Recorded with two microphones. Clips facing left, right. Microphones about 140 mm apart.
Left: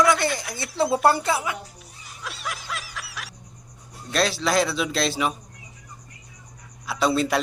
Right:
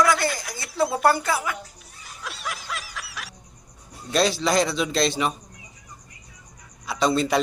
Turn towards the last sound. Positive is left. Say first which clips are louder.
# right 1 dB
turn(degrees=5)  # may be behind; listen again after turning